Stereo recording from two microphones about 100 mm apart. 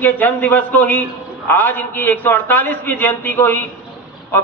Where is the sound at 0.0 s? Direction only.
20° left (ahead or behind).